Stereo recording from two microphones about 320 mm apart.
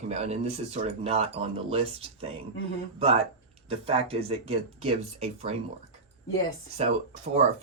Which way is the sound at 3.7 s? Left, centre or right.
Centre.